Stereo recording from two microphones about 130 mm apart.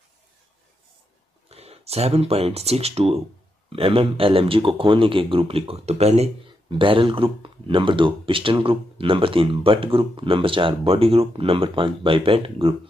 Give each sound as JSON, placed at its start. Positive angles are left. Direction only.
{"t": 1.5, "sound": "speech", "side_deg": -55}